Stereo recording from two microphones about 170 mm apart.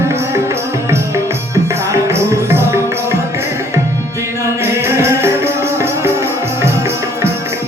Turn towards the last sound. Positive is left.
turn(degrees=-15)  # may be behind; listen again after turning